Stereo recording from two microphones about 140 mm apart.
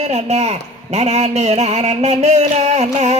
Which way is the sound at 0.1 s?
50° right (ahead or behind).